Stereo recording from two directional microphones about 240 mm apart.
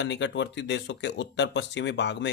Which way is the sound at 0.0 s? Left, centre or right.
Left.